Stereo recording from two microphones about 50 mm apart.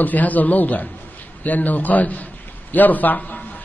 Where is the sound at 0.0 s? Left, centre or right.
Left.